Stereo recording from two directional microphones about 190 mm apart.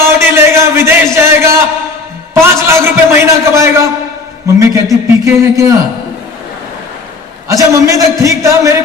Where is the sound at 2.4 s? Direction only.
15° right (ahead or behind).